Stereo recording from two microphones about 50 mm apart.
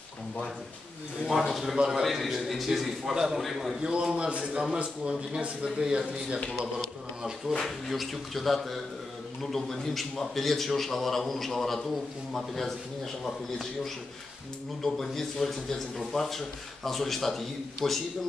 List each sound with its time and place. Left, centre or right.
1.2 s a man's voice: centre
3.8 s speech: centre
7.6 s a man's voice: centre